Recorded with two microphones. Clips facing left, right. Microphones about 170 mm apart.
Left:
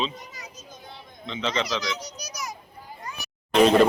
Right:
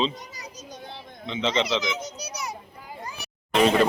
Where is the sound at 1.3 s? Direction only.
20° right (ahead or behind).